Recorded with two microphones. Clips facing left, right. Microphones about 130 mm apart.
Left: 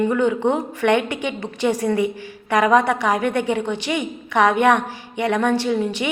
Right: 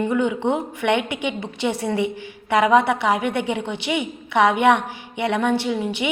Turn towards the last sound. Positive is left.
turn(degrees=-15)  # may be behind; listen again after turning